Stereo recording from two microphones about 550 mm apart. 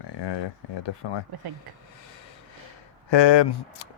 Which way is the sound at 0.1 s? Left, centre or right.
Left.